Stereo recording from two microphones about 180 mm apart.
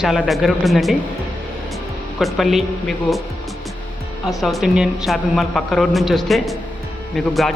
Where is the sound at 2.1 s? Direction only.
Centre (ahead or behind).